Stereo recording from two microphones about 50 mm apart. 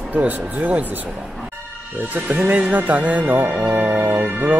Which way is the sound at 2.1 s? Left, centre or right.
Right.